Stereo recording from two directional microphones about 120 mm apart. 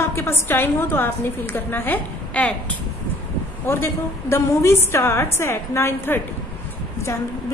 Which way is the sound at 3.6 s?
20° left (ahead or behind).